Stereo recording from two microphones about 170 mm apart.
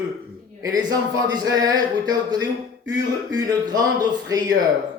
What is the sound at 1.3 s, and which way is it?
Speech, 20° right (ahead or behind).